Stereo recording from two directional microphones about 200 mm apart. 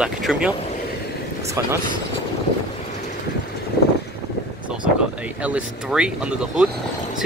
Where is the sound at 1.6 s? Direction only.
15° right (ahead or behind).